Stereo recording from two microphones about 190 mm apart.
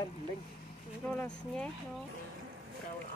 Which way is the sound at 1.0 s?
5° left (ahead or behind).